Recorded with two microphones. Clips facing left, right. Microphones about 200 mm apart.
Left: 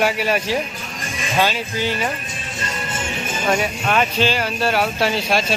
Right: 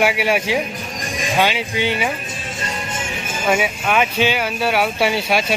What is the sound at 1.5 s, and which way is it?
Speech, 65° right (ahead or behind).